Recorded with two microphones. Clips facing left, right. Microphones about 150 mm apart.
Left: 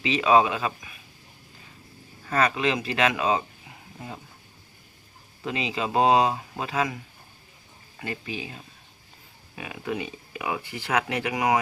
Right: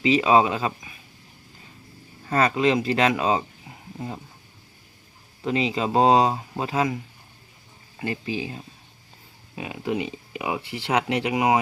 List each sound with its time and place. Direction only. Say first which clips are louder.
0.0 s speech: right 2 dB; 30° right (ahead or behind)
2.2 s speech: right 3 dB; 30° right (ahead or behind)
5.5 s speech: right 5 dB; 30° right (ahead or behind)
8.0 s speech: right 5 dB; 30° right (ahead or behind)